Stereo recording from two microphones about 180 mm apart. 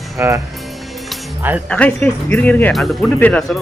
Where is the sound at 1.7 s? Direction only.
10° left (ahead or behind).